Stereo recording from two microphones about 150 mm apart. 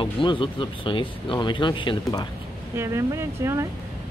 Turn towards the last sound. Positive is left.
turn(degrees=-20)  # may be behind; listen again after turning